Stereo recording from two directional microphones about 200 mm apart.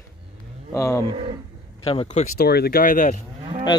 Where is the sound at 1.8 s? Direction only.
30° left (ahead or behind).